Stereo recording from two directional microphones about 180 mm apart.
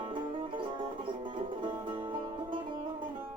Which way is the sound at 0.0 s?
25° right (ahead or behind).